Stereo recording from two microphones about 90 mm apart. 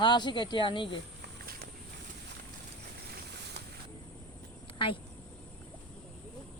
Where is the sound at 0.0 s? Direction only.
55° left (ahead or behind).